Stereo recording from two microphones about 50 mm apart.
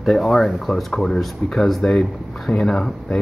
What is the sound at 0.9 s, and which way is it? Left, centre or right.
Speech, centre.